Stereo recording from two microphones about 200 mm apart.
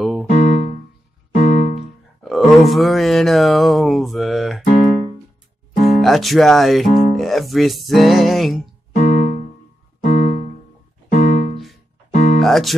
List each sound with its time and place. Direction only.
0.3 s music: 35° left (ahead or behind)
2.2 s speech: centre (ahead or behind)
5.8 s speech: centre (ahead or behind)
6.9 s music: 45° left (ahead or behind)
7.2 s speech: centre (ahead or behind)
8.9 s music: 35° left (ahead or behind)
12.4 s music: centre (ahead or behind)